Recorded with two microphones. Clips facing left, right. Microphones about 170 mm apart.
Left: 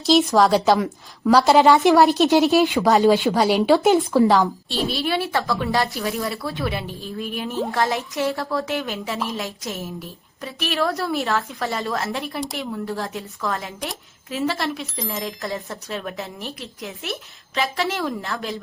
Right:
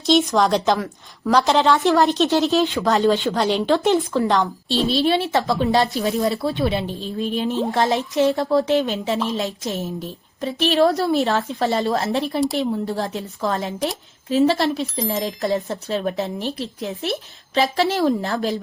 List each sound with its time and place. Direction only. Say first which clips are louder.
0.0 s a woman's voice: left 1 dB; centre (ahead or behind)
1.6 s a woman's voice: left 2 dB; 15° left (ahead or behind)
4.9 s a woman's voice: right 5 dB; 25° right (ahead or behind)